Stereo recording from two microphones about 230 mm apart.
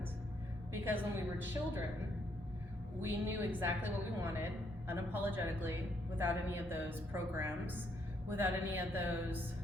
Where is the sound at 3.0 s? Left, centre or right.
Centre.